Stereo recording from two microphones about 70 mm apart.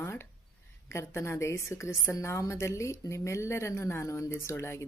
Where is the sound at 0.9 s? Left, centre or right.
Left.